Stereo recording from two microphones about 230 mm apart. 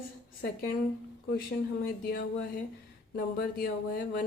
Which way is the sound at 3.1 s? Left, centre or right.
Left.